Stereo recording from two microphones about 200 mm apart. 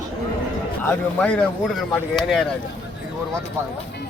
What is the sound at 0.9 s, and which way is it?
A man's voice, 10° left (ahead or behind).